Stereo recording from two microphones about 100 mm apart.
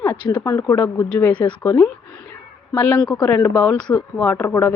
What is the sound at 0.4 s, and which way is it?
Speech, 30° left (ahead or behind).